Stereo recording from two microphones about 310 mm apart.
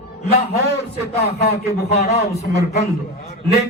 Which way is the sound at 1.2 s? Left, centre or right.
Left.